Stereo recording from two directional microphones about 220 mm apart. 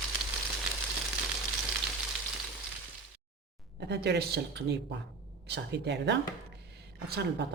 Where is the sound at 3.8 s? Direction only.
50° right (ahead or behind).